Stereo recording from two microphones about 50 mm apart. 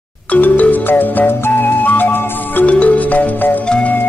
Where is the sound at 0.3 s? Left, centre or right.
Left.